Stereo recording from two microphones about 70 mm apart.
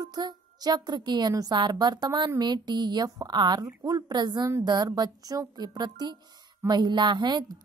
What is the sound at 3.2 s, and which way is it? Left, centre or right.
Speech, right.